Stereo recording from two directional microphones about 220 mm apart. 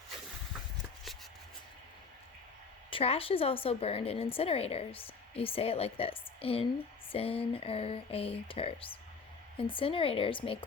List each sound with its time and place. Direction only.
2.9 s a woman's voice: 25° left (ahead or behind)